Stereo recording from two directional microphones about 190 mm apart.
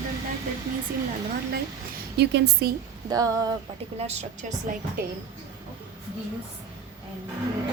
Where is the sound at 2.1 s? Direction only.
60° right (ahead or behind).